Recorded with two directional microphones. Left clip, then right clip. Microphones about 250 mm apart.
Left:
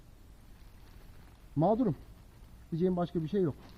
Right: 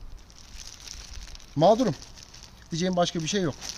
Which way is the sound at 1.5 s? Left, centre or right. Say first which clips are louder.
Right 9 dB; right.